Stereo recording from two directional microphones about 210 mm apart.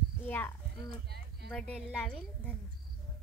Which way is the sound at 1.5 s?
Centre (ahead or behind).